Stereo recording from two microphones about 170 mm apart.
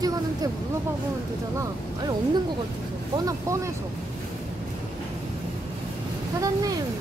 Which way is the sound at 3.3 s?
15° right (ahead or behind).